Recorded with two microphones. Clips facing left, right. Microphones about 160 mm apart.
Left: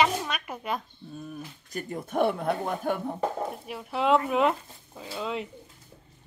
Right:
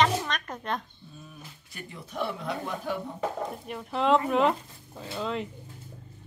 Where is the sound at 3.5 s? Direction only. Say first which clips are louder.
Even; 5° left (ahead or behind).